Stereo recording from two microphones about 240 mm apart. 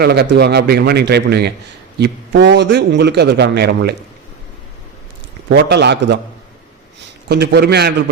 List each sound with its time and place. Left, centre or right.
0.0 s a man's voice: right
5.5 s a man's voice: right
7.3 s a man's voice: right